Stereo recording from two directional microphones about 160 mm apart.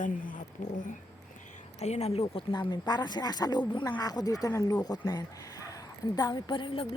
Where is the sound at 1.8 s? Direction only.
40° left (ahead or behind).